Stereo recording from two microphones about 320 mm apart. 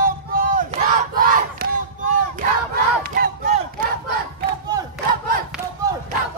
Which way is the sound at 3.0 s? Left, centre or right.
Right.